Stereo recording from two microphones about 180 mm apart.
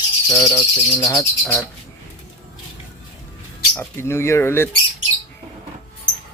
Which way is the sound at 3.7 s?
15° left (ahead or behind).